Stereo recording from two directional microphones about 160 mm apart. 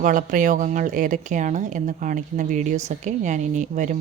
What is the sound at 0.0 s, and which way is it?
Speech, 55° right (ahead or behind).